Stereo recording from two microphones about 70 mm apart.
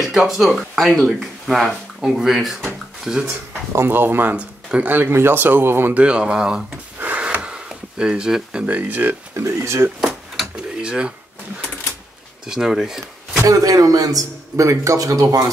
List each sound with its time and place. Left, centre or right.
0.1 s speech: centre
3.3 s speech: right
4.4 s a sound: centre
4.8 s speech: right
5.9 s speech: centre
7.0 s sniff: right
8.6 s speech: right
9.3 s speech: right
9.9 s drawer open or close: centre
10.5 s a sound: centre
12.4 s speech: centre
13.5 s a man's voice: right